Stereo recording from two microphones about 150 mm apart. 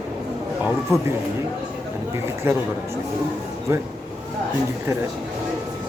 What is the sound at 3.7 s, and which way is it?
Speech, 15° right (ahead or behind).